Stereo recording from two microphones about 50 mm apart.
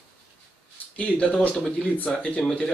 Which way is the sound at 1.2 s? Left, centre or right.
Left.